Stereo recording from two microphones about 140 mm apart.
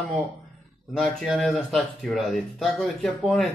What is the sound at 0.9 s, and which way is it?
Speech, centre (ahead or behind).